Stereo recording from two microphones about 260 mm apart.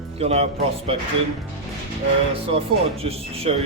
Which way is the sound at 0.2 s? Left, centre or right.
Right.